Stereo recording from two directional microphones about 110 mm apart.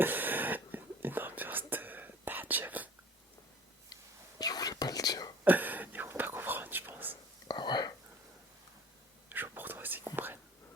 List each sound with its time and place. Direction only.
0.0 s whispering: 15° right (ahead or behind)
4.4 s whispering: 35° left (ahead or behind)
5.5 s whispering: 15° right (ahead or behind)
7.4 s whispering: 40° left (ahead or behind)
9.3 s whispering: 15° right (ahead or behind)